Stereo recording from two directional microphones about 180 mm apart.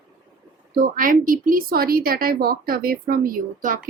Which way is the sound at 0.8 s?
50° right (ahead or behind).